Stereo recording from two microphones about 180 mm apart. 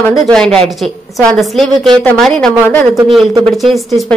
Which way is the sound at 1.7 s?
25° right (ahead or behind).